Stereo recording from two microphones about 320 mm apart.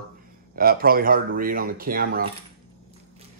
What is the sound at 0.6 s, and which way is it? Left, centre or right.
Speech, right.